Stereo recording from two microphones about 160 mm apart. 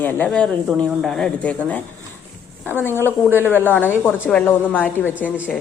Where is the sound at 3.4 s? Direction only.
10° left (ahead or behind).